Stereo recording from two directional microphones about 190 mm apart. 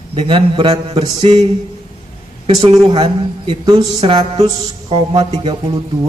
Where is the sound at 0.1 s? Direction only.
25° right (ahead or behind).